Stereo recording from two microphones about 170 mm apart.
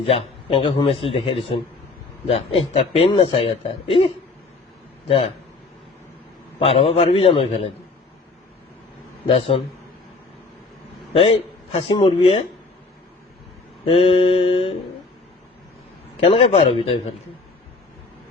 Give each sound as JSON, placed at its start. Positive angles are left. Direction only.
{"t": 0.0, "sound": "speech", "side_deg": 35}
{"t": 6.6, "sound": "speech", "side_deg": 35}
{"t": 9.2, "sound": "speech", "side_deg": 35}
{"t": 11.1, "sound": "a man's voice", "side_deg": 35}
{"t": 13.8, "sound": "speech", "side_deg": 35}
{"t": 16.2, "sound": "speech", "side_deg": 35}